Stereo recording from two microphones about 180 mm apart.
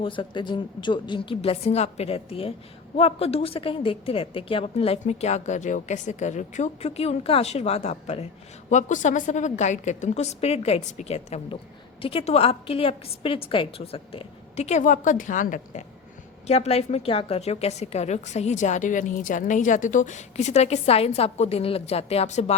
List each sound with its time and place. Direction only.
0.0 s a woman's voice: 25° left (ahead or behind); by 15.8 s 45° left (ahead or behind)
16.5 s a woman's voice: 35° left (ahead or behind)